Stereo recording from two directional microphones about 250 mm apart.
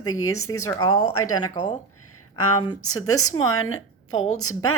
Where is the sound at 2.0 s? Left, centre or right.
Left.